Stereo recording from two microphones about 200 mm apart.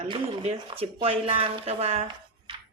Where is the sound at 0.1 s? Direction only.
30° right (ahead or behind).